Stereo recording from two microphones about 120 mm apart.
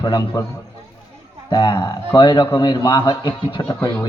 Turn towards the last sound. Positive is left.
turn(degrees=40)  # may be behind; listen again after turning